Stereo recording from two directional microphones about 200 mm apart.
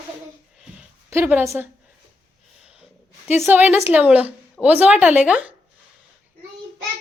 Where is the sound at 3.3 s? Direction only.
10° right (ahead or behind).